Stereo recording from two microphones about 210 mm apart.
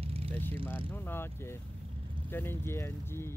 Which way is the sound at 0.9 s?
10° left (ahead or behind).